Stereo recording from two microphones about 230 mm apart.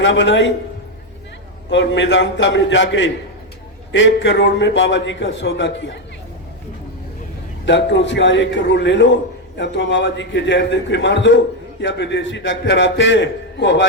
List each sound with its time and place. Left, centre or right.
0.0 s a man's voice: left
1.7 s a man's voice: left
7.6 s a man's voice: left